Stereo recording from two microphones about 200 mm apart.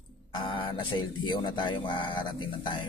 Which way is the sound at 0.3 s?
25° left (ahead or behind).